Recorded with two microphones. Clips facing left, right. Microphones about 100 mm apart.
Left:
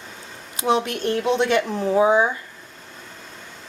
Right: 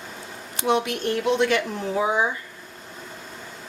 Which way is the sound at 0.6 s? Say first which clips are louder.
Left 2 dB; 30° left (ahead or behind).